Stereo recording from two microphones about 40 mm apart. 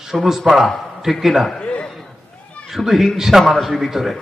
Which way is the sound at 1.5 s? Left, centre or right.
Left.